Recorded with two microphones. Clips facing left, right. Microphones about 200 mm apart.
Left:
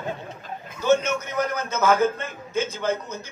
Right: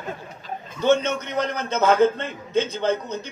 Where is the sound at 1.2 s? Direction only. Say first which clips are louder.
Right 1 dB; 30° right (ahead or behind).